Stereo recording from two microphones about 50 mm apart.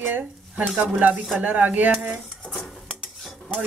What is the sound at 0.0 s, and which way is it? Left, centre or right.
Speech, right.